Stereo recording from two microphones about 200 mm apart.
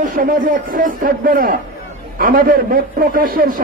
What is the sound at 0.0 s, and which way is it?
A man's voice, 40° right (ahead or behind).